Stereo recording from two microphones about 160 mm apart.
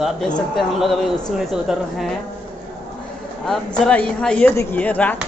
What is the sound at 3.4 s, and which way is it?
A man's voice, 5° left (ahead or behind).